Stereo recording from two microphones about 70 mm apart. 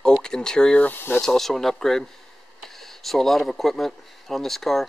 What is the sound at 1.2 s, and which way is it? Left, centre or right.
Speech, centre.